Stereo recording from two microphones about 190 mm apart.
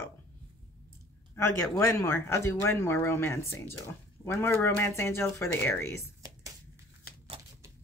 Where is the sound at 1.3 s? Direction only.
15° left (ahead or behind).